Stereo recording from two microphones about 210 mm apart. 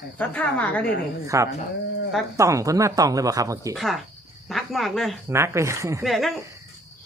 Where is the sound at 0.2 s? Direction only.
5° left (ahead or behind).